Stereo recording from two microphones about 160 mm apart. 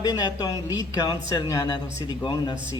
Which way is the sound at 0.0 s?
25° left (ahead or behind).